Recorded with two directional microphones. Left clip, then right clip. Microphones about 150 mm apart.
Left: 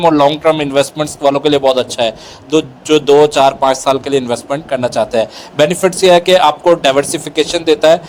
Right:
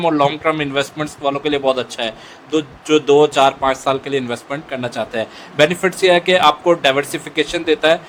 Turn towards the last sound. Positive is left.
turn(degrees=30)  # may be behind; listen again after turning